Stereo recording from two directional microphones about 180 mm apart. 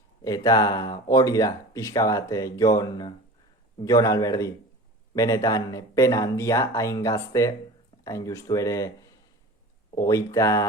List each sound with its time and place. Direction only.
0.3 s speech: 20° left (ahead or behind)